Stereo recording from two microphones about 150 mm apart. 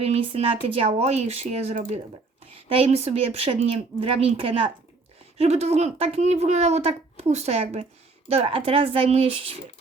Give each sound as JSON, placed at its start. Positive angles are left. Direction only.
{"t": 0.0, "sound": "speech", "side_deg": -45}